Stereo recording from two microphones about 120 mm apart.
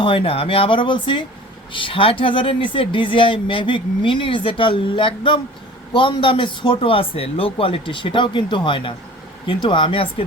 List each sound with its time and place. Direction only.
0.0 s speech: 45° left (ahead or behind)